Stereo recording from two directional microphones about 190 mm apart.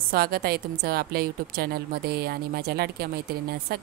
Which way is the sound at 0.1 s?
55° right (ahead or behind).